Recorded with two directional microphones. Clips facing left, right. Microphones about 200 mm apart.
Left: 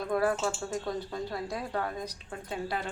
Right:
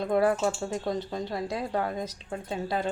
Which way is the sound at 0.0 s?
25° right (ahead or behind).